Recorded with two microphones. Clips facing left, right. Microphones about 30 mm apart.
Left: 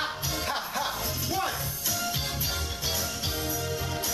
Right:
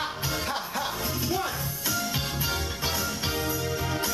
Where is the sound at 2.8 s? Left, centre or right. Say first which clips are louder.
Right 3 dB; right.